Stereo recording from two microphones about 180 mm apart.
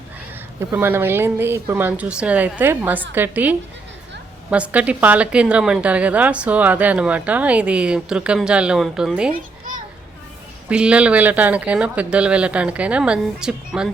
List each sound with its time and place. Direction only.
0.6 s a woman's voice: 15° right (ahead or behind)
4.5 s a woman's voice: 5° right (ahead or behind)
9.3 s children playing: 45° right (ahead or behind)
10.7 s a woman's voice: 5° right (ahead or behind)